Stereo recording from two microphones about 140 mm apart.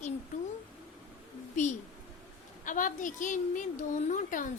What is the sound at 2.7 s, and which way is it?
A woman's voice, 70° left (ahead or behind).